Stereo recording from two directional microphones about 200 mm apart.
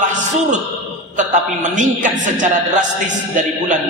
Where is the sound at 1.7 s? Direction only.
40° right (ahead or behind).